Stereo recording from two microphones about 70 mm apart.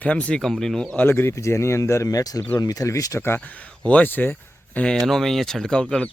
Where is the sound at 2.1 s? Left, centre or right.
Left.